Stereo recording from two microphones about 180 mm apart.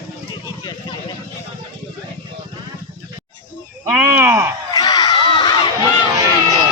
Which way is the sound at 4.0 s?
15° right (ahead or behind).